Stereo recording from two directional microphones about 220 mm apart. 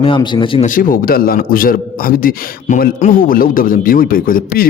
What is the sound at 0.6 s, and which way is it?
A man's voice, 40° left (ahead or behind).